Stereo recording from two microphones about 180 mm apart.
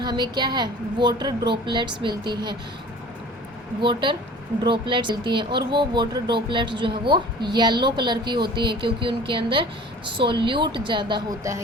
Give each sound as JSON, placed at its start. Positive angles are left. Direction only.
{"t": 0.0, "sound": "speech", "side_deg": -25}
{"t": 3.8, "sound": "speech", "side_deg": -25}